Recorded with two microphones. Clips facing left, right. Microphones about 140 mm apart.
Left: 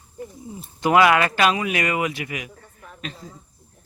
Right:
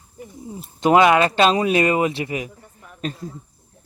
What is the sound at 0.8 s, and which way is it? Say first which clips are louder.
Speech: right 2 dB; 20° right (ahead or behind).